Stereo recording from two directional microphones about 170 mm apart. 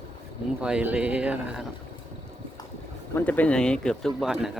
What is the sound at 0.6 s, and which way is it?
Speech, 5° right (ahead or behind).